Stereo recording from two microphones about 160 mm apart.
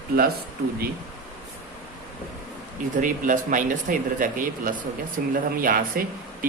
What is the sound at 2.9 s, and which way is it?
Speech, 55° right (ahead or behind).